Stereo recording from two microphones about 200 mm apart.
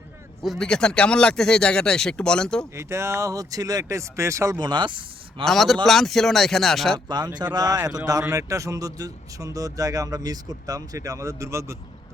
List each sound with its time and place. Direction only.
0.4 s speech: centre (ahead or behind)
2.7 s speech: 15° right (ahead or behind)
5.5 s speech: centre (ahead or behind)
7.5 s speech: 20° right (ahead or behind)